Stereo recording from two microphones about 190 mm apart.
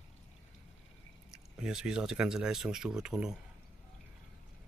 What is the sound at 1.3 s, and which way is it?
Speech, 5° right (ahead or behind).